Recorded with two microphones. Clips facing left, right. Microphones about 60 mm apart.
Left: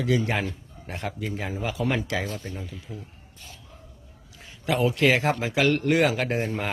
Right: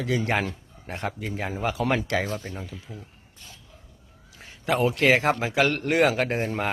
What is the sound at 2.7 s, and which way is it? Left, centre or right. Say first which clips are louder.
Speech: left 1 dB; centre.